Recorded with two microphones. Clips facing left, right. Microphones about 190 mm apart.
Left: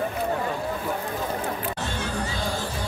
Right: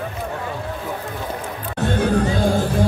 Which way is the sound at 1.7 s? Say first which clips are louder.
Right 11 dB; 55° right (ahead or behind).